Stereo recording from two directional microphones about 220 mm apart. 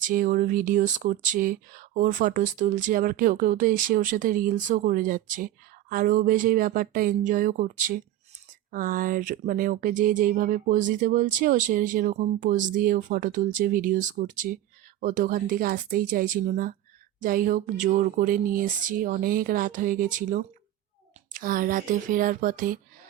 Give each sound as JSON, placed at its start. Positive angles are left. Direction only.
{"t": 0.0, "sound": "speech", "side_deg": -40}